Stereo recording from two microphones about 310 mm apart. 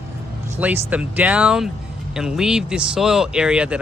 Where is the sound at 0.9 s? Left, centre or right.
Centre.